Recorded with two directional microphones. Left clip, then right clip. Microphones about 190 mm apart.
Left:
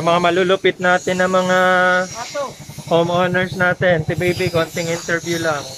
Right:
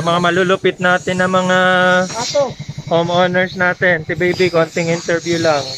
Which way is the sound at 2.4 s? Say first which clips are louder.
Right 9 dB; 30° right (ahead or behind).